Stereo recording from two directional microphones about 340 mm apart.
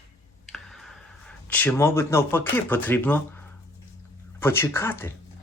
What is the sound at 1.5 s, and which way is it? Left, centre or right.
Speech, centre.